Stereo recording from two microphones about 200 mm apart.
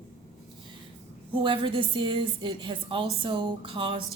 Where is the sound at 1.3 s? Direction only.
25° right (ahead or behind).